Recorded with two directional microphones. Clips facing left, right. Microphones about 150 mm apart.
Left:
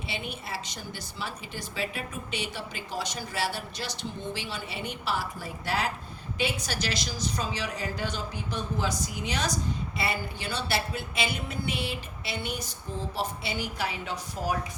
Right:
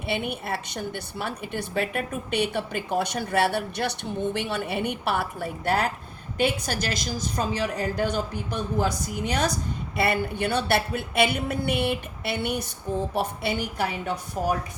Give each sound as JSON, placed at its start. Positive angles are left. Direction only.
{"t": 0.1, "sound": "a woman's voice", "side_deg": -60}